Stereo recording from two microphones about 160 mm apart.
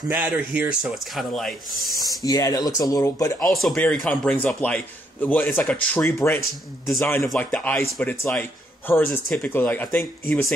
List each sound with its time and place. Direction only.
0.1 s speech: 10° right (ahead or behind)
2.0 s speech: 20° left (ahead or behind)
3.3 s a man's voice: centre (ahead or behind)